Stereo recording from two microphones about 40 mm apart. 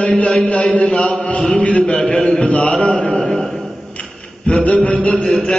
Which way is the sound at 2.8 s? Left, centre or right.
Left.